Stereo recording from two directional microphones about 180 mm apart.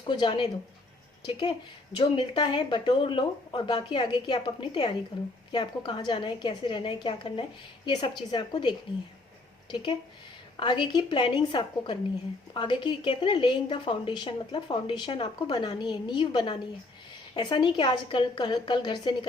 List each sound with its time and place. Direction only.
0.0 s a woman's voice: 25° left (ahead or behind)
10.6 s a woman's voice: 25° left (ahead or behind)